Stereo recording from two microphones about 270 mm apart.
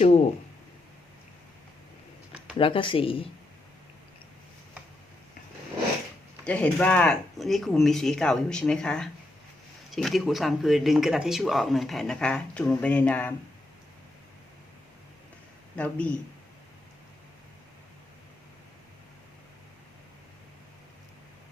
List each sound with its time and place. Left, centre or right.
2.6 s speech: centre
6.4 s speech: centre
15.7 s speech: centre